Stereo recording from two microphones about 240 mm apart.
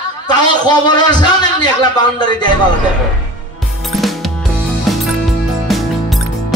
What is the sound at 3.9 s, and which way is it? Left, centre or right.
Music, centre.